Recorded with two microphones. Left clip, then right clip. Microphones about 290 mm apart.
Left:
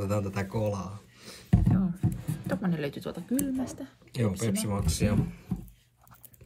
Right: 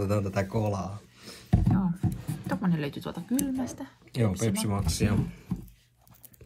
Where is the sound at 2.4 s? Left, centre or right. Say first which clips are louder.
Even; centre.